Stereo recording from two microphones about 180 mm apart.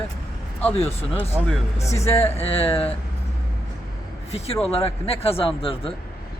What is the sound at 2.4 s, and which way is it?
Speech, 30° left (ahead or behind).